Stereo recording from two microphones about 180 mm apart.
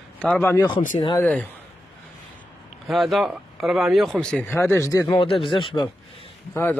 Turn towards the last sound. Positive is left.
turn(degrees=10)  # may be behind; listen again after turning